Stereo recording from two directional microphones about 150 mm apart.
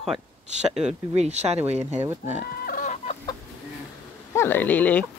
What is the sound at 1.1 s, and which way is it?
Speech, 50° right (ahead or behind).